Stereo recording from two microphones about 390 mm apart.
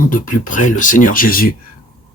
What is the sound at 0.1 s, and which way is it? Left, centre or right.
A man's voice, centre.